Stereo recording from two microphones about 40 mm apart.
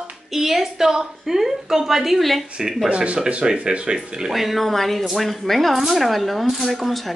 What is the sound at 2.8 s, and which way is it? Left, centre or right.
Speech, right.